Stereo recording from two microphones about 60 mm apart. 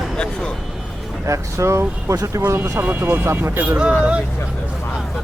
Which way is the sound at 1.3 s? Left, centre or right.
Right.